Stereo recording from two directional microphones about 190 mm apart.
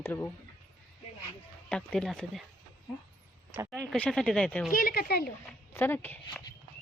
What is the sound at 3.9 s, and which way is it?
Speech, 5° left (ahead or behind).